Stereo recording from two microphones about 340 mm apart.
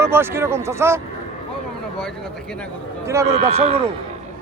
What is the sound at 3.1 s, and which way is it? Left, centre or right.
Speech, centre.